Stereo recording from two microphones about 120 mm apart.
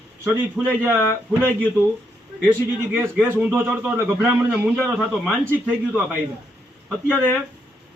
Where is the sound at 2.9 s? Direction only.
15° right (ahead or behind).